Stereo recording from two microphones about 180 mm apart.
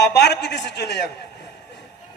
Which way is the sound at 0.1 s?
70° left (ahead or behind).